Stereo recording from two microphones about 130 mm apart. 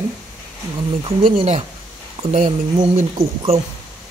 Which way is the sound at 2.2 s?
55° right (ahead or behind).